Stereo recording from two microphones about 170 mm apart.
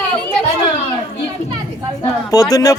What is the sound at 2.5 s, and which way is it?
Speech, 20° left (ahead or behind).